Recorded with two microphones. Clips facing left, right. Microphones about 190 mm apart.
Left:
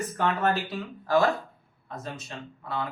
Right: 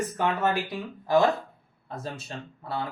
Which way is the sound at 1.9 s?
35° right (ahead or behind).